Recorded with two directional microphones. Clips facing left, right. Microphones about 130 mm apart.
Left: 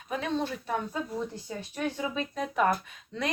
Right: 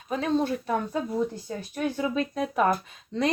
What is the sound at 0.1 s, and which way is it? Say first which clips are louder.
Speech: right 5 dB; 35° right (ahead or behind).